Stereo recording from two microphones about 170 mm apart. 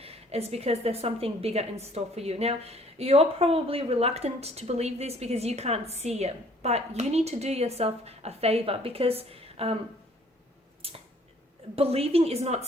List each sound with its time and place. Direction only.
0.0 s a woman's voice: 35° right (ahead or behind)
10.8 s a sound: 35° right (ahead or behind)
11.8 s a woman's voice: 35° right (ahead or behind)